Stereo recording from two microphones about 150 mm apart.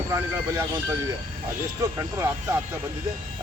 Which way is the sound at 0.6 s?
15° right (ahead or behind).